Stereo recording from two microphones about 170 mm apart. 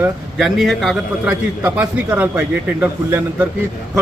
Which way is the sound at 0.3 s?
Centre (ahead or behind).